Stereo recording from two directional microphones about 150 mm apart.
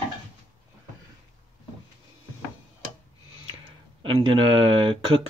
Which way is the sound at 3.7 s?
35° right (ahead or behind).